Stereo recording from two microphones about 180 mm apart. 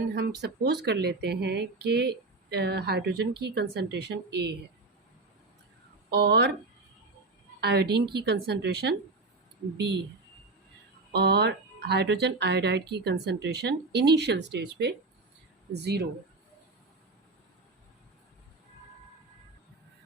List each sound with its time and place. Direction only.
0.2 s speech: 65° right (ahead or behind)
6.1 s speech: 70° right (ahead or behind)
7.6 s a woman's voice: 65° right (ahead or behind)
11.1 s speech: 65° right (ahead or behind)